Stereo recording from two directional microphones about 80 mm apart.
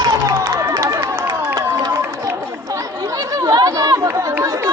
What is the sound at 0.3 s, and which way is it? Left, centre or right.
Run, right.